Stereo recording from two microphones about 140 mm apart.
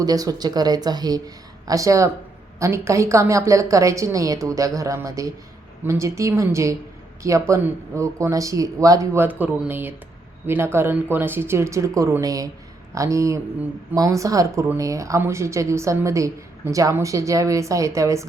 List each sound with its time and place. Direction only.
0.0 s speech: 25° right (ahead or behind)
9.4 s speech: 10° right (ahead or behind)